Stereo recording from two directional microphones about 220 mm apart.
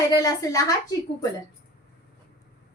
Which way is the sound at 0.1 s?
15° left (ahead or behind).